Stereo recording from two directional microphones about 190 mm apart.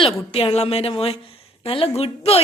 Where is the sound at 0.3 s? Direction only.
30° left (ahead or behind).